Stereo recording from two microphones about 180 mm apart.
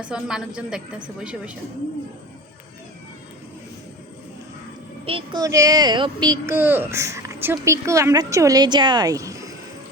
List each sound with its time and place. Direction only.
0.0 s a woman's voice: 5° right (ahead or behind)
5.0 s a child's voice: 30° right (ahead or behind)
5.4 s speech: 20° right (ahead or behind)